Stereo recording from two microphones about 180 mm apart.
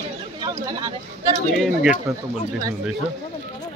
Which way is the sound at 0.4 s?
20° right (ahead or behind).